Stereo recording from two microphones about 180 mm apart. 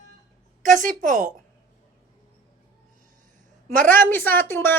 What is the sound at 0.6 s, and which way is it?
Speech, 45° right (ahead or behind).